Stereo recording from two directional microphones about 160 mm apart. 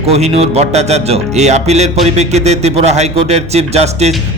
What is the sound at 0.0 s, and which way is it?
Speech, 40° right (ahead or behind).